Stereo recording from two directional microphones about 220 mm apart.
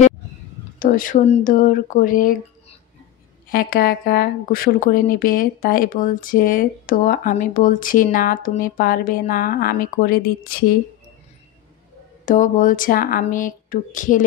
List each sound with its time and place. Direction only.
0.7 s speech: 40° left (ahead or behind)
3.4 s speech: 40° left (ahead or behind)
12.3 s speech: 35° left (ahead or behind)